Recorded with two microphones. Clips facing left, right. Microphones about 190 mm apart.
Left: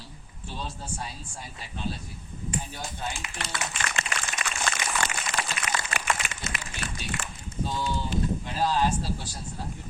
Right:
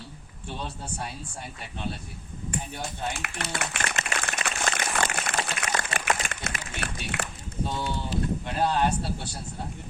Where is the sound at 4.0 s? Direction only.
50° right (ahead or behind).